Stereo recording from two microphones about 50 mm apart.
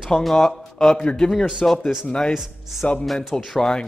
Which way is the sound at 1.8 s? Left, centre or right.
Centre.